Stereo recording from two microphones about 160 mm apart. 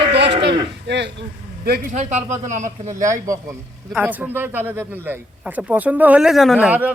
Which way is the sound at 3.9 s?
10° right (ahead or behind).